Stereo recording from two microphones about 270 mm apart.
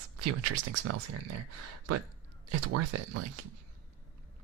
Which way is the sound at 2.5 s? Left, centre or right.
Right.